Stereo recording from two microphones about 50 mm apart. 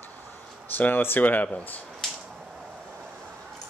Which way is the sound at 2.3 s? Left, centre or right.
Centre.